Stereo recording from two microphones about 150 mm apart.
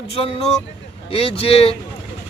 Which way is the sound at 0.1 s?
40° left (ahead or behind).